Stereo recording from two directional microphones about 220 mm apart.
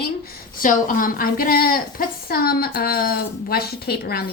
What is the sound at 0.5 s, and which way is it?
A woman's voice, 40° left (ahead or behind).